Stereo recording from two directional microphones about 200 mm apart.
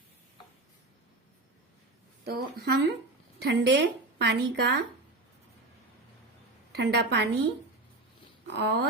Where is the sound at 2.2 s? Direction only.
50° right (ahead or behind).